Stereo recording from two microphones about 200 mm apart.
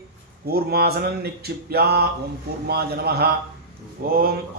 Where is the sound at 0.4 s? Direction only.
50° right (ahead or behind).